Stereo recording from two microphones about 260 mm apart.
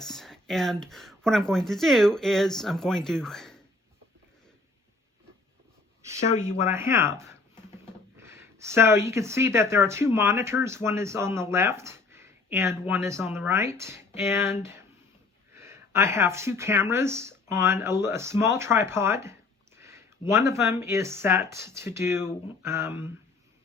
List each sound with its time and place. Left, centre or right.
0.0 s speech: centre
6.1 s speech: left
6.6 s speech: centre